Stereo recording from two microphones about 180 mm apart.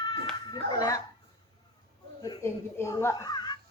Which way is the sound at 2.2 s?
15° left (ahead or behind).